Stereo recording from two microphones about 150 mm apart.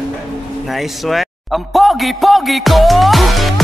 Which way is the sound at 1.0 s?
Centre (ahead or behind).